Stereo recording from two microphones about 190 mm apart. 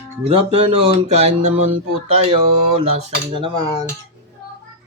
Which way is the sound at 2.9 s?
25° right (ahead or behind).